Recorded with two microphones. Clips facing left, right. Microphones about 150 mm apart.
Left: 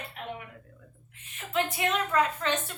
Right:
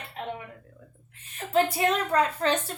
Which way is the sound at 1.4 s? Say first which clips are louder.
Right 6 dB; 35° right (ahead or behind).